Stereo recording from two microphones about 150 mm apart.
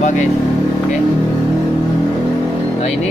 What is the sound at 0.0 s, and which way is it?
Speech, 55° left (ahead or behind).